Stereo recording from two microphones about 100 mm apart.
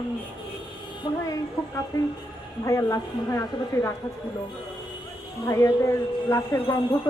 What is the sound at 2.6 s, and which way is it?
Speech, 30° left (ahead or behind).